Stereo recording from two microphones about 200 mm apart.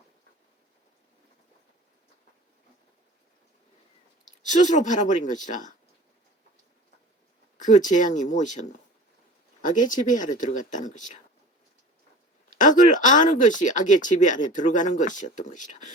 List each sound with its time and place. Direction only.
4.3 s speech: 40° left (ahead or behind)
7.6 s speech: 40° left (ahead or behind)
12.5 s speech: 40° left (ahead or behind)